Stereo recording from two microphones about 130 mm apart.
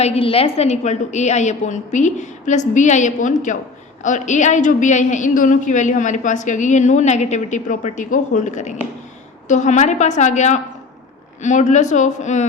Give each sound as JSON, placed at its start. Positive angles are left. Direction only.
{"t": 0.0, "sound": "a woman's voice", "side_deg": 50}